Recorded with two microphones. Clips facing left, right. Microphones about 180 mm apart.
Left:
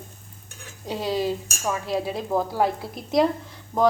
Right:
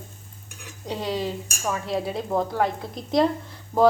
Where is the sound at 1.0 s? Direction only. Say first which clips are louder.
Left 3 dB; 10° left (ahead or behind).